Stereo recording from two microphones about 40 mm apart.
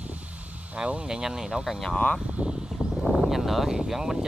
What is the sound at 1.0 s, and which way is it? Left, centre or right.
Speech, centre.